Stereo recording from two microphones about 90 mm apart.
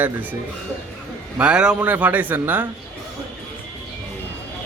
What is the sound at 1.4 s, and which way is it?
Speech, 10° right (ahead or behind).